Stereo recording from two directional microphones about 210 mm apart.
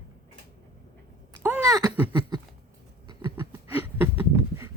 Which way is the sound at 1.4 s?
10° right (ahead or behind).